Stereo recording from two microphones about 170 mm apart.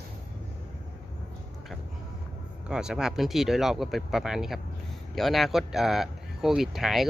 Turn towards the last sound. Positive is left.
turn(degrees=0)  # may be behind; listen again after turning